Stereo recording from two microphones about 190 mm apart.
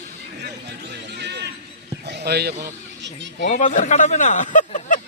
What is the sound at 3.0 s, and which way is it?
Speech, 65° right (ahead or behind).